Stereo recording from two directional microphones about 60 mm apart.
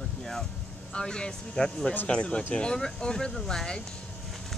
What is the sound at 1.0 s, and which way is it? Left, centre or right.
Speech, centre.